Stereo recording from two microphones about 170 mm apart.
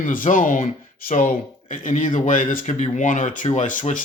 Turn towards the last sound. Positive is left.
turn(degrees=50)  # may be behind; listen again after turning